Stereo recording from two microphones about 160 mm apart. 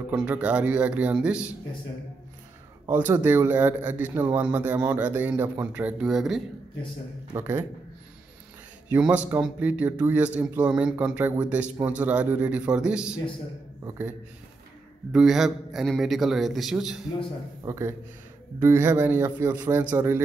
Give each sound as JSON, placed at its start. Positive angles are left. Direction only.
{"t": 0.1, "sound": "a man's voice", "side_deg": -5}
{"t": 2.9, "sound": "a man's voice", "side_deg": -15}
{"t": 7.3, "sound": "a man's voice", "side_deg": -15}
{"t": 8.8, "sound": "a man's voice", "side_deg": -10}
{"t": 15.1, "sound": "a man's voice", "side_deg": 0}
{"t": 17.6, "sound": "a man's voice", "side_deg": -15}